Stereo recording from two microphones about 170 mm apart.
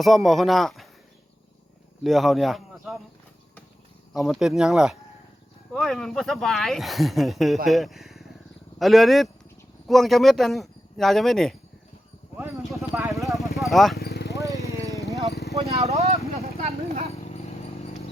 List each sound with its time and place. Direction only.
0.0 s speech: centre (ahead or behind)
2.0 s a man's voice: centre (ahead or behind)
4.1 s speech: centre (ahead or behind)
12.4 s clip-clop: 10° right (ahead or behind)
13.2 s vehicle: centre (ahead or behind)
13.6 s speech: centre (ahead or behind)
14.0 s vehicle: 75° left (ahead or behind)
14.3 s vehicle: 20° right (ahead or behind)
15.3 s a sound: 75° left (ahead or behind)
15.9 s speech: 40° right (ahead or behind)
17.2 s dog: 40° left (ahead or behind)